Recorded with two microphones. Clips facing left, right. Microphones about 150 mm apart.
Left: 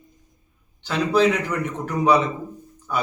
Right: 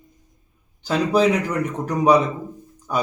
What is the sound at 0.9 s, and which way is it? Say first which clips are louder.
Speech: right 1 dB; 10° right (ahead or behind).